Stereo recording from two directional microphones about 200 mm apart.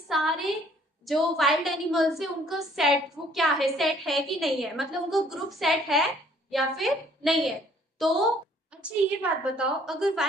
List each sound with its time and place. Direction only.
0.1 s a woman's voice: centre (ahead or behind)